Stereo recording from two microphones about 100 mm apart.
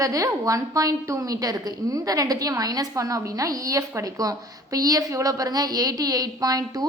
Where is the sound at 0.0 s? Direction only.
35° right (ahead or behind).